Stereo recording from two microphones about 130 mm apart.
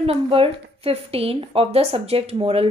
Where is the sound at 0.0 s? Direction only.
45° right (ahead or behind).